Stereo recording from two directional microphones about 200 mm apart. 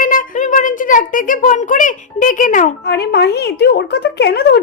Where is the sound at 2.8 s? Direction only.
55° left (ahead or behind).